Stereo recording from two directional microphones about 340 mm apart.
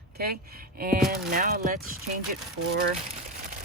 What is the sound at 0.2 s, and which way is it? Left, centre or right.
Speech, right.